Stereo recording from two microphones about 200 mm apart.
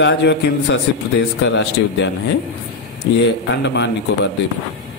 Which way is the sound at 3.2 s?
60° left (ahead or behind).